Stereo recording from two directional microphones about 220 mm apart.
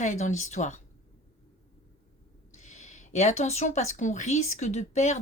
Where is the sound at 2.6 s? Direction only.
35° left (ahead or behind).